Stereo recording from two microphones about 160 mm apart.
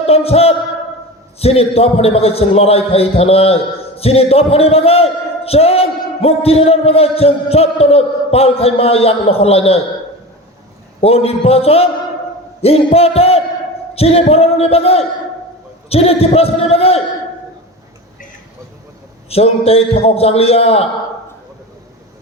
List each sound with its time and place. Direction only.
0.0 s a man's voice: 40° left (ahead or behind)
11.0 s a man's voice: 40° left (ahead or behind)
19.3 s a man's voice: 40° left (ahead or behind)